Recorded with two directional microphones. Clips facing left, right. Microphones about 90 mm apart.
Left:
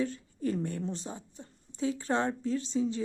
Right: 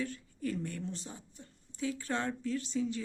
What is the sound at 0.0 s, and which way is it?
A woman's voice, 25° left (ahead or behind).